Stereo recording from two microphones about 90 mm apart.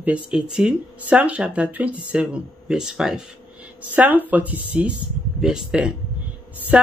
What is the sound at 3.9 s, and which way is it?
Speech, 20° right (ahead or behind).